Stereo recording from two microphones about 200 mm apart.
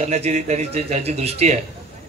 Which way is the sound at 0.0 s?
35° right (ahead or behind).